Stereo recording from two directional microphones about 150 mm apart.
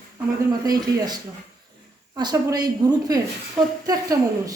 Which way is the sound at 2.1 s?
30° right (ahead or behind).